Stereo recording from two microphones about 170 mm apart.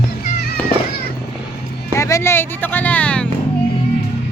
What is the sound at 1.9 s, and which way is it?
Music, 15° left (ahead or behind).